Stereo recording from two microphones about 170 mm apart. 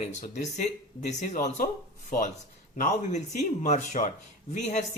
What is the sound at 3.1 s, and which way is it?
Speech, 45° left (ahead or behind).